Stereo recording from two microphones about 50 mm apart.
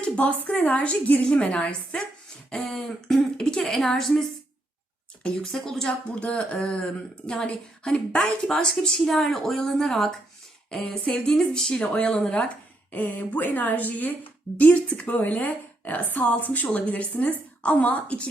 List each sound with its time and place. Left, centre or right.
0.0 s a woman's voice: left
2.5 s a woman's voice: centre
3.3 s a woman's voice: centre
3.6 s a woman's voice: centre
5.4 s a woman's voice: centre
6.2 s a woman's voice: left
12.9 s a woman's voice: left
14.6 s a woman's voice: left